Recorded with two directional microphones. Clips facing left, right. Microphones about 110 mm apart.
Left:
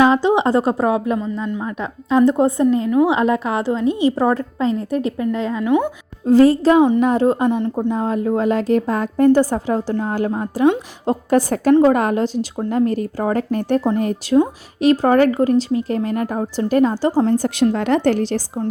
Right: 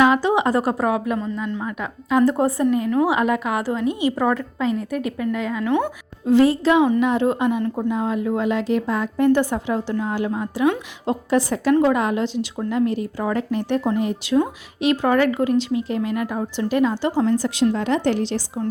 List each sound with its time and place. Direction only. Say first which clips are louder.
0.0 s a woman's voice: left 3 dB; 25° left (ahead or behind)
5.6 s speech: left 4 dB; 10° left (ahead or behind)
6.2 s speech: left 4 dB; 40° left (ahead or behind)
7.6 s a woman's voice: left 3 dB; 25° left (ahead or behind)
7.9 s speech: left 4 dB; 40° left (ahead or behind)
11.7 s speech: left 4 dB; 35° left (ahead or behind)
11.9 s speech: left 3 dB; 45° left (ahead or behind)